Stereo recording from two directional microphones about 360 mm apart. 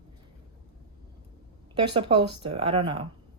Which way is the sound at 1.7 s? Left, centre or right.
Centre.